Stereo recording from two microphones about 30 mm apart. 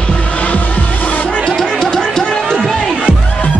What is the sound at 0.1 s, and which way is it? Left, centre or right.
Music, left.